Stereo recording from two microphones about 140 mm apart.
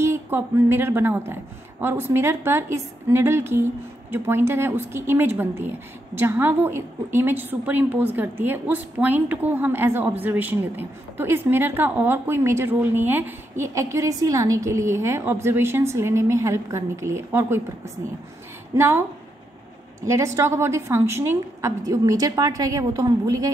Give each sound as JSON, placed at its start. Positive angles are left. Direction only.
{"t": 0.0, "sound": "a woman's voice", "side_deg": -20}